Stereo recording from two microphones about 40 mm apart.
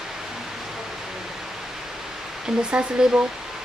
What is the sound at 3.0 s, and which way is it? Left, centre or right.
Speech, centre.